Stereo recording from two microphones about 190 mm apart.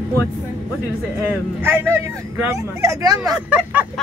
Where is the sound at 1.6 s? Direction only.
10° right (ahead or behind).